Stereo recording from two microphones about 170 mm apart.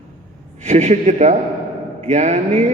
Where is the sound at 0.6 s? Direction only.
45° right (ahead or behind).